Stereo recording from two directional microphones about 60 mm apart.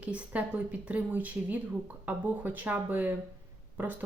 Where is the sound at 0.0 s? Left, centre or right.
Right.